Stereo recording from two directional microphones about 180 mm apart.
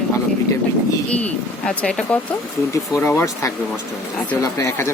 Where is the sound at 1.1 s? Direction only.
5° left (ahead or behind).